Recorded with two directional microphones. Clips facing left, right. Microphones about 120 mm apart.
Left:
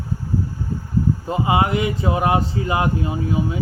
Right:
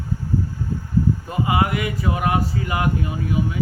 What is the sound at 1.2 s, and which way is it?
Speech, 25° left (ahead or behind).